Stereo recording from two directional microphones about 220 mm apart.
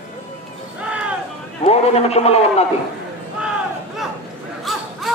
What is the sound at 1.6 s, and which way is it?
A man's voice, 30° left (ahead or behind).